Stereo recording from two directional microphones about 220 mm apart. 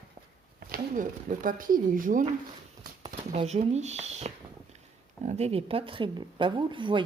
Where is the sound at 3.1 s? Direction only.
30° right (ahead or behind).